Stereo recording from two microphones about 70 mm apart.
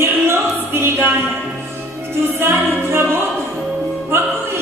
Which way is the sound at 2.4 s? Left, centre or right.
Right.